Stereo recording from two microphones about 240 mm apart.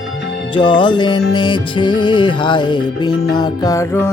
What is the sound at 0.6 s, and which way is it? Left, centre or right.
Music, centre.